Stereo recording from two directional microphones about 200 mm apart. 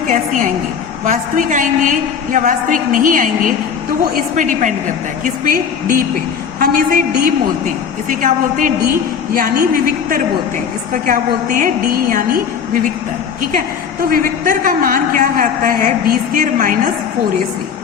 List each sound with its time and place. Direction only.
1.0 s a woman's voice: 40° right (ahead or behind)
14.0 s a woman's voice: 45° right (ahead or behind)